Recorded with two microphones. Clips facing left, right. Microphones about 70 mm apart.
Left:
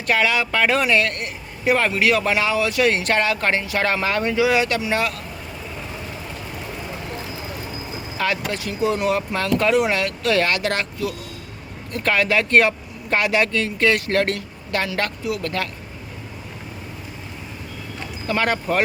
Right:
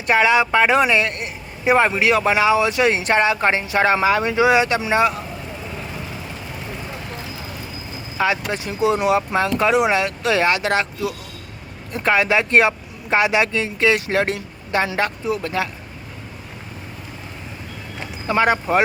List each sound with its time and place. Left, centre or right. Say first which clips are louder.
0.1 s speech: right 4 dB; right
4.4 s speech: right 1 dB; right
8.2 s speech: right 3 dB; centre
18.3 s speech: right 4 dB; centre